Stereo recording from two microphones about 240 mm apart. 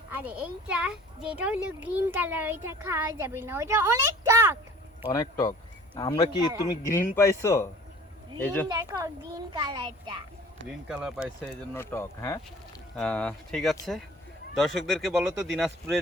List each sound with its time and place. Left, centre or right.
0.1 s a child's voice: centre
5.0 s speech: centre
8.6 s a child's voice: centre
11.7 s speech: centre